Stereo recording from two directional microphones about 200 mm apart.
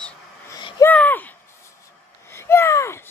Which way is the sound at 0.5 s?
20° left (ahead or behind).